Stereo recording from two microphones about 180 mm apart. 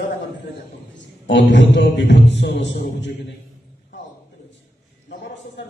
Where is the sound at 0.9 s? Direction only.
80° left.